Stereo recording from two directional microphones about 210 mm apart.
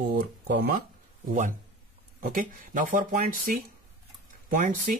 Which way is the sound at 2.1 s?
40° right (ahead or behind).